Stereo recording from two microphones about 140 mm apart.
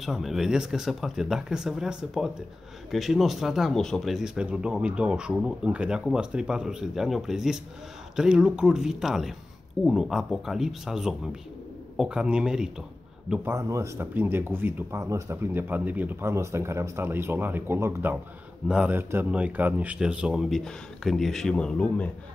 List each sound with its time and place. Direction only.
0.0 s speech: centre (ahead or behind)
13.3 s speech: 15° right (ahead or behind); by 22.1 s 10° left (ahead or behind)